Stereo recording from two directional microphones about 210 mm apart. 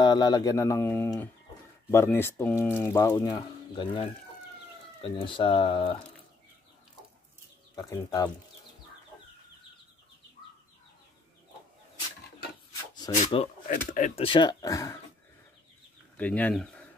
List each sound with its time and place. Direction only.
0.0 s speech: 20° left (ahead or behind)
7.7 s speech: 15° left (ahead or behind)
13.2 s speech: 30° left (ahead or behind)
14.2 s speech: 20° left (ahead or behind)
16.2 s speech: 5° left (ahead or behind)